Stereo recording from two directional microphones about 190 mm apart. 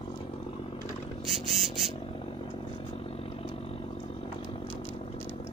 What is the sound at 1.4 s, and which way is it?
Frog, 30° right (ahead or behind).